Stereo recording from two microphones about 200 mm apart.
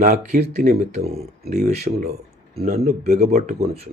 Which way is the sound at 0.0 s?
35° right (ahead or behind).